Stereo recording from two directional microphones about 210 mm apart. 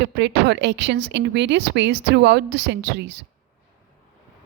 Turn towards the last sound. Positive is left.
turn(degrees=-55)  # may be behind; listen again after turning